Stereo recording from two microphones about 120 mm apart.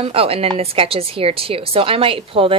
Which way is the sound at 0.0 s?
50° right (ahead or behind).